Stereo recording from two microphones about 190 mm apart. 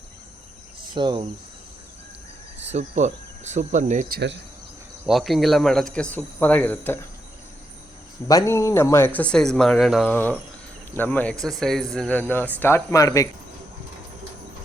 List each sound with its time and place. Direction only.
0.9 s cricket: 25° right (ahead or behind)
2.6 s speech: 35° right (ahead or behind)
5.0 s speech: centre (ahead or behind)
8.3 s speech: 15° left (ahead or behind)